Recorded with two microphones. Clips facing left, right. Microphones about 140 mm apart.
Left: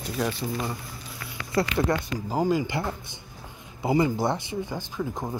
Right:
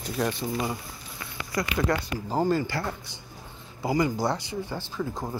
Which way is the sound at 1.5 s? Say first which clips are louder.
Left 2 dB; 25° left (ahead or behind).